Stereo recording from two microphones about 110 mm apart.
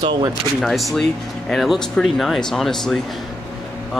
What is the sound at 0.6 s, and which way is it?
Speech, centre (ahead or behind).